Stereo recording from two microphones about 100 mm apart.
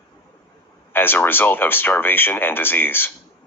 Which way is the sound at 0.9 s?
20° left (ahead or behind).